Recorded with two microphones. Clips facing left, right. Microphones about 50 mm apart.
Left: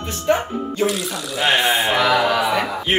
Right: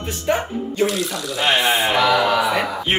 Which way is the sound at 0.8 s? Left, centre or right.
Centre.